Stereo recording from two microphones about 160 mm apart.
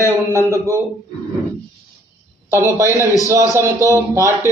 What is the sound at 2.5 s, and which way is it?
A man's voice, 15° right (ahead or behind).